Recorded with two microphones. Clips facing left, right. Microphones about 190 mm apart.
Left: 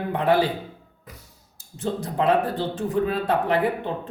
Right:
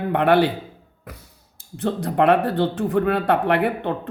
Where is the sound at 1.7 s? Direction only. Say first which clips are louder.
Right 4 dB; 65° right (ahead or behind).